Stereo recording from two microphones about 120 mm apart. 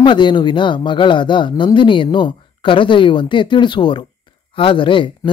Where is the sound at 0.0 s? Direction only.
40° left (ahead or behind).